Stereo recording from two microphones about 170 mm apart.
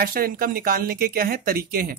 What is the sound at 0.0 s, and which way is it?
Speech, 60° right (ahead or behind).